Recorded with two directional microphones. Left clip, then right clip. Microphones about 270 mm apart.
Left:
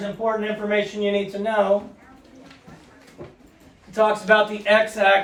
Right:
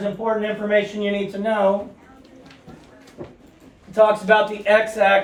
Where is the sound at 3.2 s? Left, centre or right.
Centre.